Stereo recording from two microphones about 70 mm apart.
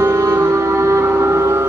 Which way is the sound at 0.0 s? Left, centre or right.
Right.